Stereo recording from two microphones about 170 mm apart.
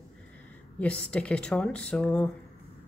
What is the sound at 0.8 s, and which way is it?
A woman's voice, 5° left (ahead or behind).